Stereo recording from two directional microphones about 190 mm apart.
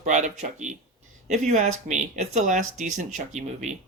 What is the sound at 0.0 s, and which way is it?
Speech, 40° right (ahead or behind).